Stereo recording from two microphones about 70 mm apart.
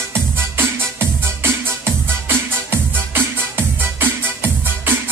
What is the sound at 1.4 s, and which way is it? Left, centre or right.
Music, right.